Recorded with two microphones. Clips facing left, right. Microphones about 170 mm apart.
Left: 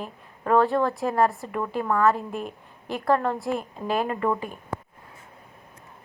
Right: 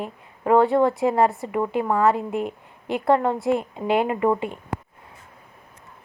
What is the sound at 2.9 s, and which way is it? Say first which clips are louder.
A woman's voice: right 3 dB; 25° right (ahead or behind).